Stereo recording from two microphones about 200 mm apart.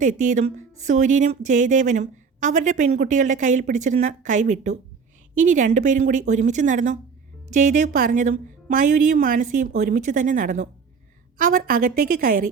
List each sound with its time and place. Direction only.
0.0 s a woman's voice: 40° right (ahead or behind)